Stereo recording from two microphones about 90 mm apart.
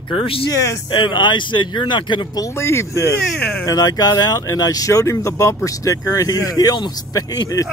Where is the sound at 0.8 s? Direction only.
60° left (ahead or behind).